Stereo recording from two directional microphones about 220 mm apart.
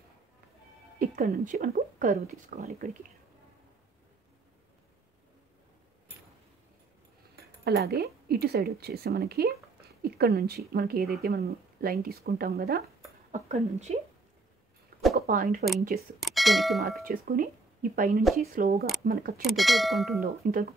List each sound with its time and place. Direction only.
0.9 s speech: 40° right (ahead or behind)
7.6 s a woman's voice: 45° right (ahead or behind)
13.3 s speech: 30° right (ahead or behind)
15.1 s a woman's voice: 45° right (ahead or behind)
16.2 s speech: centre (ahead or behind)
17.0 s speech: 40° right (ahead or behind)
18.2 s clang: centre (ahead or behind)
19.0 s speech: 40° right (ahead or behind)
19.4 s clang: centre (ahead or behind)
20.2 s speech: 40° right (ahead or behind)